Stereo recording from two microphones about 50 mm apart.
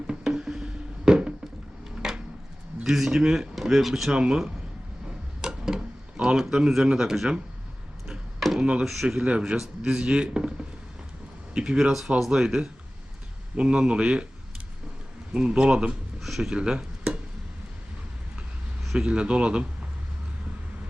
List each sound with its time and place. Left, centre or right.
0.1 s music: centre
2.0 s a sound: centre
2.8 s speech: centre
4.1 s speech: centre
5.0 s tick-tock: centre
6.1 s speech: centre
8.5 s a sound: right
8.8 s speech: centre
9.0 s speech: right
15.3 s speech: centre
16.2 s speech: centre
18.9 s speech: right